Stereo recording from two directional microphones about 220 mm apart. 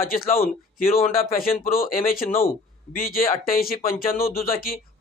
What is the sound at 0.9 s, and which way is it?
Speech, 40° left (ahead or behind).